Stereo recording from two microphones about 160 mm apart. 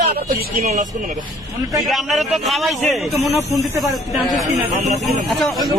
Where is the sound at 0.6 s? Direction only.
45° right (ahead or behind).